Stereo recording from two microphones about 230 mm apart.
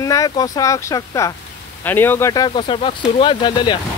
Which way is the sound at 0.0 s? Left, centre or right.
Centre.